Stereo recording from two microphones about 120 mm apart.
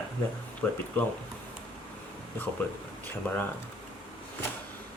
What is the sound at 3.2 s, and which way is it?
Speech, 15° left (ahead or behind).